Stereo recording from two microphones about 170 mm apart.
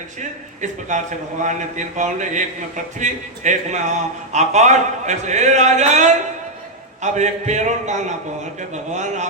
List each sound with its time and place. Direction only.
0.2 s a man's voice: 45° right (ahead or behind)